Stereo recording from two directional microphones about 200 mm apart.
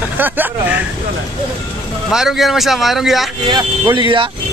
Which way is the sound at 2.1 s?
Centre (ahead or behind).